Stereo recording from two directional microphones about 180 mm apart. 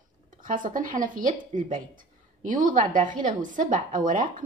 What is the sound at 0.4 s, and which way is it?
Speech, 45° right (ahead or behind).